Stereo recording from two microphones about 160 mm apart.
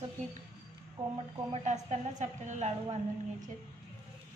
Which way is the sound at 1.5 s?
45° right (ahead or behind).